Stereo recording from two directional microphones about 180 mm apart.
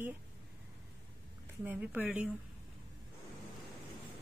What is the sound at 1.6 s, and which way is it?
Speech, 10° right (ahead or behind).